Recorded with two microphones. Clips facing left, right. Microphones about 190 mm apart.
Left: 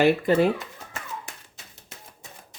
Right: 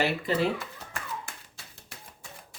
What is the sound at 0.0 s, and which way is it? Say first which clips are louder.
Speech: left 8 dB; 50° left (ahead or behind).